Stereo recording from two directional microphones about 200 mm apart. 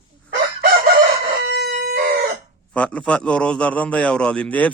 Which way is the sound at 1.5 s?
60° right (ahead or behind).